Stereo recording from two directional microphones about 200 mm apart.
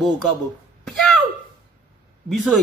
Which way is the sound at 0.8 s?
Centre (ahead or behind).